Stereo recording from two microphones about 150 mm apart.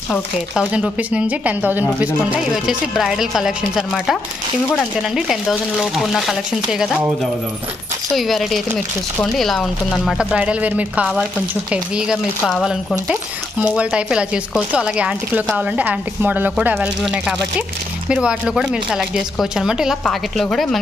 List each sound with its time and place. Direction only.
0.6 s speech: 5° right (ahead or behind)